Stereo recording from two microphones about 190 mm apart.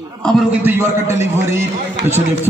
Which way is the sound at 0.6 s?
10° right (ahead or behind).